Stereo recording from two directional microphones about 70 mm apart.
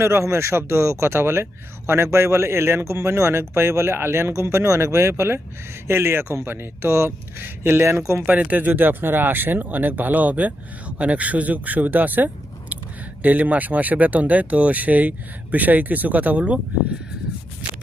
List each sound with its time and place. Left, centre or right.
0.0 s a man's voice: right; by 16.6 s centre